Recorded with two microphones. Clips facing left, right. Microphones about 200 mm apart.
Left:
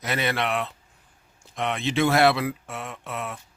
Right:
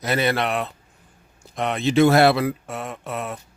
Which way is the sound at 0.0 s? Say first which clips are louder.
Right 5 dB; 35° right (ahead or behind).